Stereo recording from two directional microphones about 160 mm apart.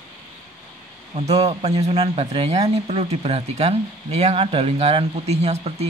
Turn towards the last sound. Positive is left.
turn(degrees=-40)  # may be behind; listen again after turning